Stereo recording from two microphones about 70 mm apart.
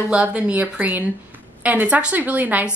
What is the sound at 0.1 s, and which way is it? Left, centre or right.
A woman's voice, centre.